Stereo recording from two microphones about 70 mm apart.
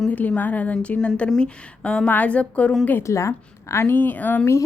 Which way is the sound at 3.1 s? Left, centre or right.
Left.